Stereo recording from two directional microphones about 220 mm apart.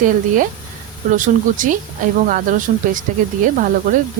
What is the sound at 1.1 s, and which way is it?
Speech, 35° right (ahead or behind).